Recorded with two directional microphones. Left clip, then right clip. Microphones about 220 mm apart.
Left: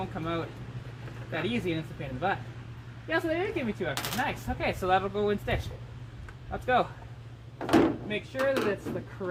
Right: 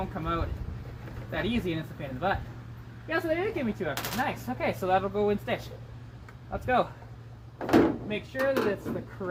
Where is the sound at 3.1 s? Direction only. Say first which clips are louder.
Even; 15° left (ahead or behind).